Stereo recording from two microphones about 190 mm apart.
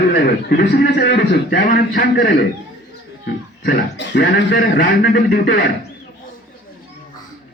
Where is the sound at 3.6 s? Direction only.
55° left (ahead or behind).